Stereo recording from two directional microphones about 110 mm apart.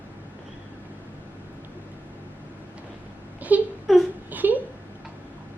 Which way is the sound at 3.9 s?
Centre (ahead or behind).